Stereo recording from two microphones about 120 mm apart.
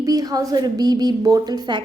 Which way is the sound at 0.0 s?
30° right (ahead or behind).